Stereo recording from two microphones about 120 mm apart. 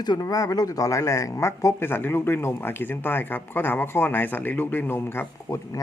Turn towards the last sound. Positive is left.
turn(degrees=25)  # may be behind; listen again after turning